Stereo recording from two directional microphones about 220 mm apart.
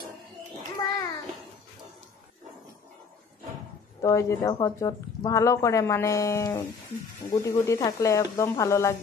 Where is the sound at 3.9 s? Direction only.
15° left (ahead or behind).